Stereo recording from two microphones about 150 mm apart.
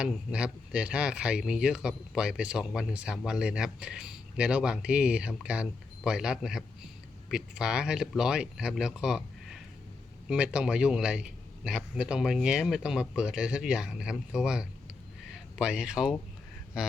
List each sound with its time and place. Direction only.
0.0 s a man's voice: 5° right (ahead or behind)